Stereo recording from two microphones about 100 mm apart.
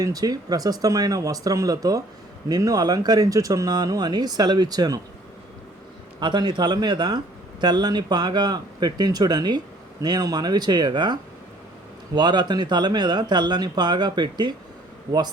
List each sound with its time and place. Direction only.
0.0 s speech: 40° right (ahead or behind)
6.1 s speech: 50° right (ahead or behind)